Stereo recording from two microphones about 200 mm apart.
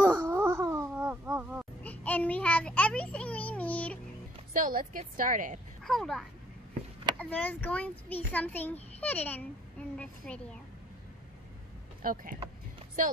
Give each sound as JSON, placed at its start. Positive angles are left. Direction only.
{"t": 0.0, "sound": "wail", "side_deg": -10}
{"t": 1.8, "sound": "a sound", "side_deg": 10}
{"t": 4.6, "sound": "a woman's voice", "side_deg": -45}
{"t": 5.9, "sound": "a woman's voice", "side_deg": 5}
{"t": 12.0, "sound": "a woman's voice", "side_deg": -45}